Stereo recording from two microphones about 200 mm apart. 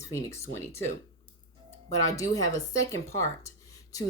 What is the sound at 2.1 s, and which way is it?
Speech, 15° left (ahead or behind).